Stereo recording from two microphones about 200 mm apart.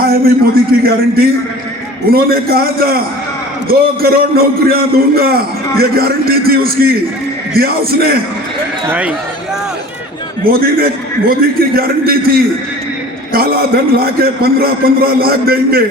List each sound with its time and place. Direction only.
0.0 s a man's voice: 50° right (ahead or behind)
8.9 s speech: 5° right (ahead or behind)
10.5 s a man's voice: 50° right (ahead or behind)